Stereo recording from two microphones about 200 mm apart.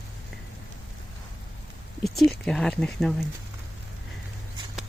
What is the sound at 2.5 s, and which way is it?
Speech, 5° left (ahead or behind).